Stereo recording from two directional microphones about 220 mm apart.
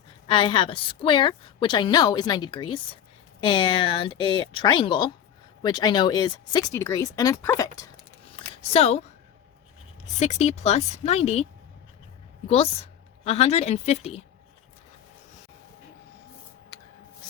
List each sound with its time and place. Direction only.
0.3 s a woman's voice: 20° left (ahead or behind)
8.4 s a sound: 25° left (ahead or behind)
10.2 s a woman's voice: 30° left (ahead or behind)
12.5 s a woman's voice: 25° left (ahead or behind)